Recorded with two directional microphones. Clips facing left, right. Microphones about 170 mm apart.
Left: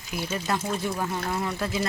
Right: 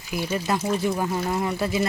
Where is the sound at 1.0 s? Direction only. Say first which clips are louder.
Right 4 dB; 15° right (ahead or behind).